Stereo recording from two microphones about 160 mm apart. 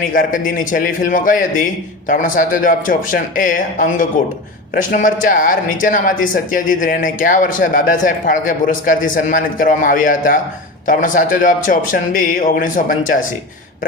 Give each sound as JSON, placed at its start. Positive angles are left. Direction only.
{"t": 0.0, "sound": "speech", "side_deg": 60}